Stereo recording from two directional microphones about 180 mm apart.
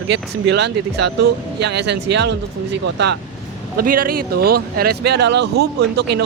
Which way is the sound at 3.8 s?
55° right (ahead or behind).